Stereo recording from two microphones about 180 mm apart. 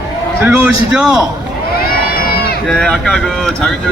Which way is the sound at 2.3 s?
60° left (ahead or behind).